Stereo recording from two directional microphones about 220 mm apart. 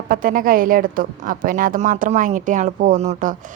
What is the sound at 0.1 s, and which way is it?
A woman's voice, 40° right (ahead or behind).